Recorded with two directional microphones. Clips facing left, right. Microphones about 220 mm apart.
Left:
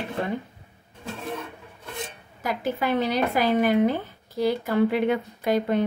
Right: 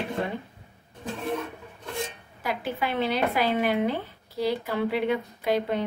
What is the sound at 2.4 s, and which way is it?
A woman's voice, 45° left (ahead or behind).